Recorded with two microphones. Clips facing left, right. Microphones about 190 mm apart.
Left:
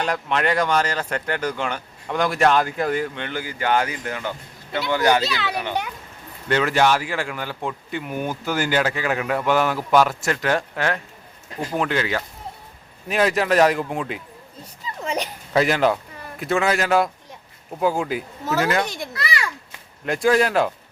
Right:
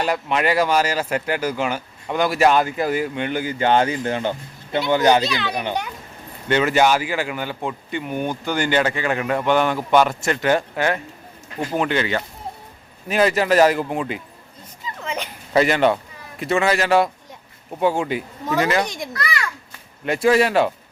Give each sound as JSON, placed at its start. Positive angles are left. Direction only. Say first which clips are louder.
{"t": 0.0, "sound": "a child's voice", "louder": "right 2 dB", "side_deg": -5}
{"t": 5.3, "sound": "a man's voice", "louder": "right 1 dB", "side_deg": 5}
{"t": 14.8, "sound": "children playing", "louder": "left 2 dB", "side_deg": 35}
{"t": 15.5, "sound": "a man's voice", "louder": "right 2 dB", "side_deg": 0}
{"t": 19.1, "sound": "children playing", "louder": "even", "side_deg": 25}
{"t": 20.1, "sound": "a man's voice", "louder": "right 2 dB", "side_deg": 0}